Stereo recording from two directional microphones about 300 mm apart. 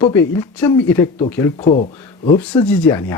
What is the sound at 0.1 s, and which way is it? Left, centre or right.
Speech, centre.